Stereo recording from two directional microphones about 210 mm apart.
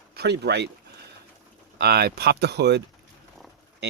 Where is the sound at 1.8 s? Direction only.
50° right (ahead or behind).